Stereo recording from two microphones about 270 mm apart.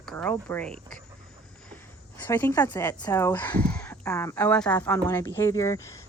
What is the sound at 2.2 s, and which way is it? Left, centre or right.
Speech, centre.